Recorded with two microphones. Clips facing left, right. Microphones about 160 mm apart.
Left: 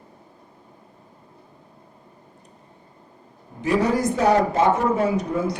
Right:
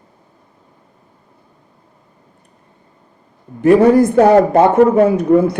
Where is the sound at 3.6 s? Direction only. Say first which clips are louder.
Right 12 dB; 55° right (ahead or behind).